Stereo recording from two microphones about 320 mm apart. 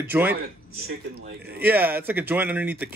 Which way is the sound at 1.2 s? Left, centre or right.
Right.